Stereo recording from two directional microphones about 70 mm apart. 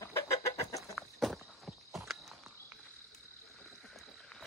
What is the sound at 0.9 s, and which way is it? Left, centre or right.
Walk, centre.